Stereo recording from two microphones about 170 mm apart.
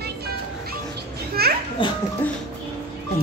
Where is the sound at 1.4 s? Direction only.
65° right (ahead or behind).